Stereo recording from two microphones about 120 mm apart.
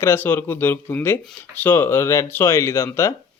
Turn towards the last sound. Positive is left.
turn(degrees=25)  # may be behind; listen again after turning